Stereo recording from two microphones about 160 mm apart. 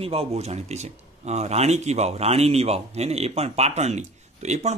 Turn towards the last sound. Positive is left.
turn(degrees=-45)  # may be behind; listen again after turning